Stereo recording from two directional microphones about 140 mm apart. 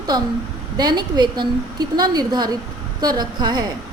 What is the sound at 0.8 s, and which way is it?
A woman's voice, 30° right (ahead or behind).